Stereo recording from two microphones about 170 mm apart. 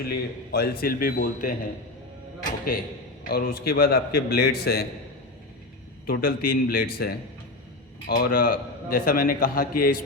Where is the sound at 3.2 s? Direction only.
60° left (ahead or behind).